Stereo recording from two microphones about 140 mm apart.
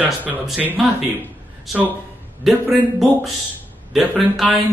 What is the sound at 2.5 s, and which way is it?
Speech, centre (ahead or behind).